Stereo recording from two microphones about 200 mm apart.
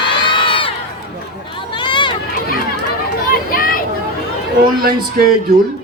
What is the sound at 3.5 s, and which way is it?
Vehicle, 45° left (ahead or behind).